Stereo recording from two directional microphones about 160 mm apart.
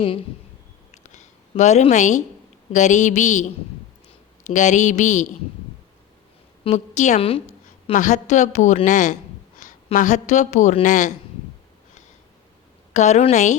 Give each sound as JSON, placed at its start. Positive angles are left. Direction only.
{"t": 0.9, "sound": "a sound", "side_deg": 50}
{"t": 2.7, "sound": "a woman's voice", "side_deg": 50}
{"t": 4.4, "sound": "a woman's voice", "side_deg": 50}
{"t": 6.7, "sound": "a woman's voice", "side_deg": 45}
{"t": 7.9, "sound": "a woman's voice", "side_deg": 50}
{"t": 12.9, "sound": "a woman's voice", "side_deg": 45}